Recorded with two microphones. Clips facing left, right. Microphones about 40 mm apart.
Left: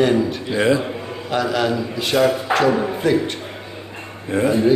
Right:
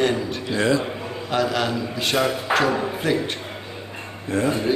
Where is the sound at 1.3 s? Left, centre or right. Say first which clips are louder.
Left 3 dB; centre.